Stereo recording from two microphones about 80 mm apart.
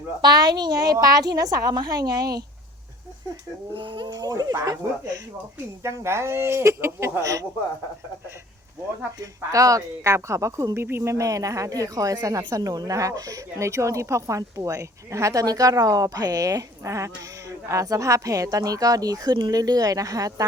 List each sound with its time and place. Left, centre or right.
0.2 s a woman's voice: right
3.8 s speech: right
4.1 s speech: right
5.8 s a woman's voice: right
9.1 s a woman's voice: right